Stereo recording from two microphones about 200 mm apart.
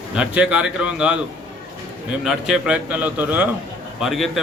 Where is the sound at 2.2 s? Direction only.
Centre (ahead or behind).